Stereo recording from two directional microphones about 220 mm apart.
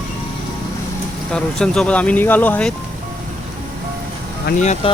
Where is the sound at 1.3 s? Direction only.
5° left (ahead or behind).